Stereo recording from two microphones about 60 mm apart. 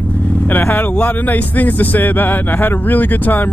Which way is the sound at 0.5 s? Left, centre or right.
Left.